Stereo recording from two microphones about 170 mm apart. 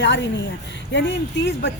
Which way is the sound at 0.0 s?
90° left.